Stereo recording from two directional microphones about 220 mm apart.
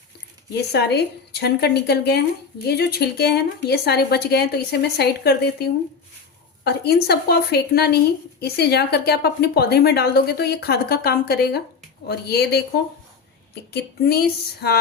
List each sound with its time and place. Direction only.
0.7 s a woman's voice: 50° left (ahead or behind)